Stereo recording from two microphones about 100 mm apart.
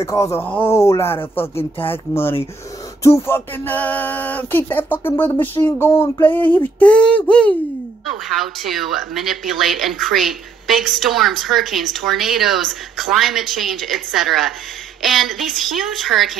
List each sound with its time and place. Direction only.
0.0 s speech: 30° left (ahead or behind)
0.7 s speech: 30° left (ahead or behind)
6.2 s a sound: 20° left (ahead or behind)
8.4 s speech: centre (ahead or behind)